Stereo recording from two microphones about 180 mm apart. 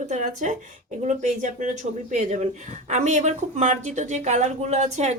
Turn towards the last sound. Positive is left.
turn(degrees=-40)  # may be behind; listen again after turning